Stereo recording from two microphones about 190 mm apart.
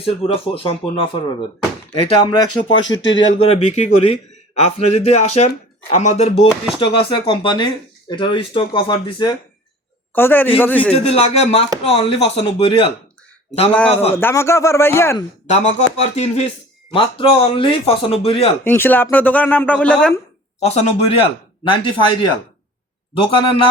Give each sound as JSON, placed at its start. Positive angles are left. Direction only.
{"t": 0.0, "sound": "a man's voice", "side_deg": 30}
{"t": 2.7, "sound": "speech", "side_deg": 80}
{"t": 3.2, "sound": "a man's voice", "side_deg": 30}
{"t": 6.7, "sound": "a man's voice", "side_deg": 25}
{"t": 10.1, "sound": "a man's voice", "side_deg": 10}
{"t": 10.9, "sound": "a man's voice", "side_deg": 30}
{"t": 13.7, "sound": "speech", "side_deg": 5}
{"t": 15.5, "sound": "a man's voice", "side_deg": 35}
{"t": 18.6, "sound": "speech", "side_deg": 10}
{"t": 20.6, "sound": "a man's voice", "side_deg": 35}
{"t": 23.2, "sound": "a man's voice", "side_deg": 30}